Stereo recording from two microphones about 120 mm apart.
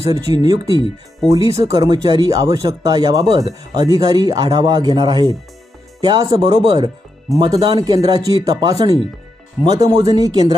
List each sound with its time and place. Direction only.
0.0 s speech: 30° right (ahead or behind)